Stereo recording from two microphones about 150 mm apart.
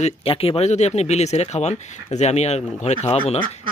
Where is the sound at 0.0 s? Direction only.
40° left (ahead or behind).